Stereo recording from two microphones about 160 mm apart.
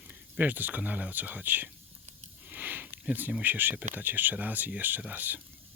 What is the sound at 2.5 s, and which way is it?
Sniff, 10° right (ahead or behind).